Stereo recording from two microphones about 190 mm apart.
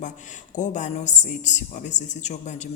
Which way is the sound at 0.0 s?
40° left (ahead or behind).